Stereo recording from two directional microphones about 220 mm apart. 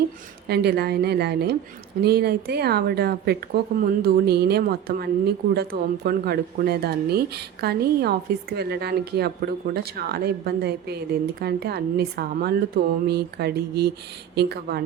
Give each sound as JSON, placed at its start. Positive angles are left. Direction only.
{"t": 0.4, "sound": "speech", "side_deg": -45}